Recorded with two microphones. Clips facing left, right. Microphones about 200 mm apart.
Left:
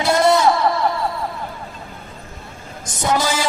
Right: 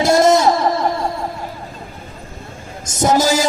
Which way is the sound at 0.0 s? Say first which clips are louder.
Right 3 dB; 45° right (ahead or behind).